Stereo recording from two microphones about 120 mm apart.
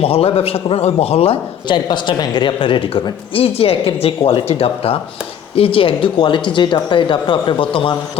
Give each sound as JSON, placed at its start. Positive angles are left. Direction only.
{"t": 0.0, "sound": "a man's voice", "side_deg": 55}